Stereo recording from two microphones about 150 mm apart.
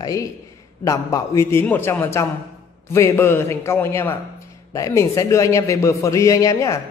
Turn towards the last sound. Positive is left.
turn(degrees=20)  # may be behind; listen again after turning